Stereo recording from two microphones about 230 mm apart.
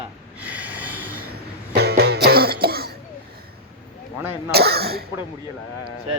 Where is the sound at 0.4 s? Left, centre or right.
Centre.